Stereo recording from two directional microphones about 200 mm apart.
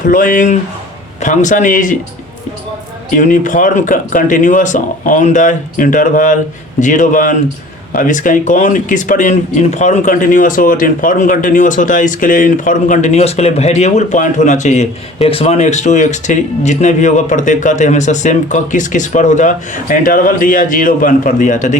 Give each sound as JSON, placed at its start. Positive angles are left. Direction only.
{"t": 0.0, "sound": "speech", "side_deg": 45}
{"t": 3.2, "sound": "speech", "side_deg": 40}